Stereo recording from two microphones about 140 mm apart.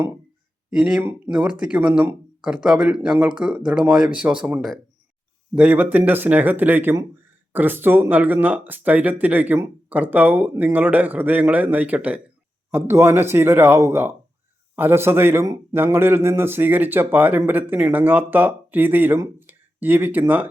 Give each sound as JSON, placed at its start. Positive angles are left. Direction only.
{"t": 0.7, "sound": "a man's voice", "side_deg": -5}
{"t": 5.5, "sound": "a man's voice", "side_deg": -10}